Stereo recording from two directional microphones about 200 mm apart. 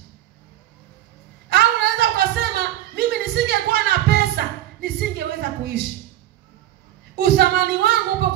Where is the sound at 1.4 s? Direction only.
55° right (ahead or behind).